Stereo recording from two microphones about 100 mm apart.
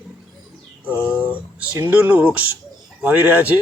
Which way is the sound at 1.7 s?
20° right (ahead or behind).